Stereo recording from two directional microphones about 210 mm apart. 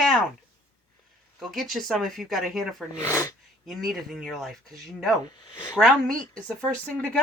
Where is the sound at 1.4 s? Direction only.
Centre (ahead or behind).